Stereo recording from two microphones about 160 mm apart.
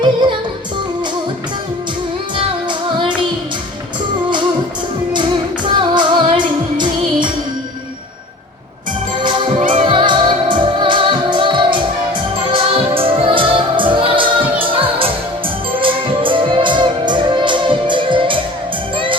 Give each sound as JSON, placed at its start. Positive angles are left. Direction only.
{"t": 2.3, "sound": "music", "side_deg": -30}
{"t": 5.1, "sound": "music", "side_deg": -30}
{"t": 9.1, "sound": "music", "side_deg": -30}